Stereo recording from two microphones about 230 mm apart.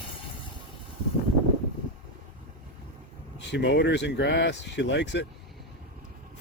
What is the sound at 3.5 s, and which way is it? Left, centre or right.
Speech, left.